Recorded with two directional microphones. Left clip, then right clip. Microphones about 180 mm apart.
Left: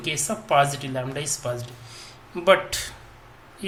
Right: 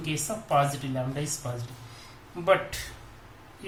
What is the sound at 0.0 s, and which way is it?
Speech, 30° left (ahead or behind).